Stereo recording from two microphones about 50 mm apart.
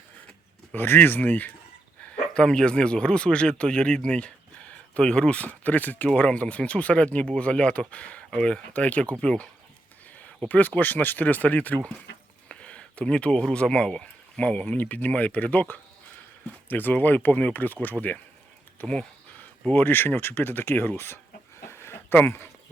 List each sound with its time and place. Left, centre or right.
0.8 s speech: left
2.3 s speech: centre; by 6.1 s left
6.1 s speech: left
8.3 s speech: centre
8.7 s speech: left
10.5 s speech: left
12.5 s speech: left
18.8 s speech: left
19.7 s speech: left
21.7 s a sound: left
22.1 s speech: left